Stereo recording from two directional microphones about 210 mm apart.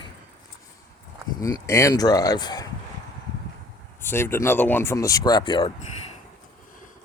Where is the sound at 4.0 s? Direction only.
10° left (ahead or behind).